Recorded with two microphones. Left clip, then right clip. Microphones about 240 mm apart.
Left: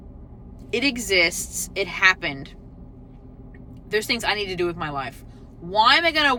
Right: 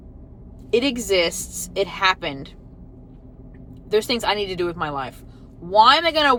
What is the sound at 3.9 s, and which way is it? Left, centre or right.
Speech, centre.